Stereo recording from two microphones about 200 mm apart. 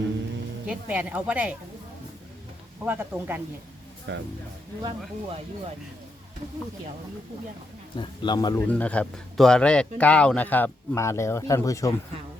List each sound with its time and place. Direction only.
0.7 s a woman's voice: 5° right (ahead or behind)
2.8 s a woman's voice: 10° right (ahead or behind)
4.1 s speech: 65° right (ahead or behind)
4.8 s speech: 25° right (ahead or behind)
7.9 s speech: 20° left (ahead or behind)
8.6 s speech: 5° left (ahead or behind)